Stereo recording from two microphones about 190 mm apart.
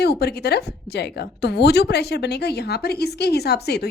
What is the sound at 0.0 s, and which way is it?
A woman's voice, 60° left (ahead or behind).